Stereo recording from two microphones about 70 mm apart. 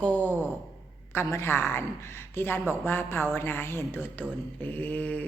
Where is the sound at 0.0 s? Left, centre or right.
Left.